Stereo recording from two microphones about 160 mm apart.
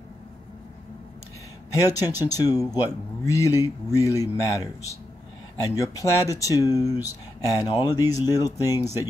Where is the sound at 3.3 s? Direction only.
20° left (ahead or behind).